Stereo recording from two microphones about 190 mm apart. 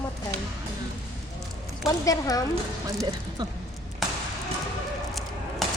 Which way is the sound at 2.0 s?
20° left (ahead or behind).